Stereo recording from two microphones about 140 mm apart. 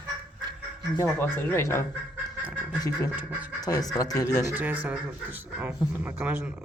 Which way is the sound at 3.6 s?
25° left (ahead or behind).